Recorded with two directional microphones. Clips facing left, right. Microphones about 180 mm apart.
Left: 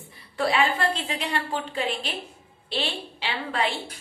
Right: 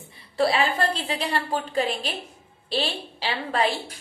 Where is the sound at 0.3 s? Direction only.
35° right (ahead or behind).